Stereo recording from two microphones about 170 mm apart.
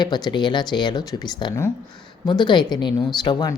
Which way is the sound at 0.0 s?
25° left (ahead or behind).